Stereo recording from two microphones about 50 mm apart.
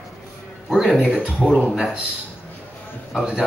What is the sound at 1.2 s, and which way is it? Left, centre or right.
Speech, right.